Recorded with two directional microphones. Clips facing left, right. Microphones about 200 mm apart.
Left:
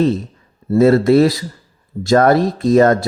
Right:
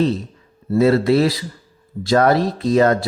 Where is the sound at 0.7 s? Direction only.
45° left (ahead or behind).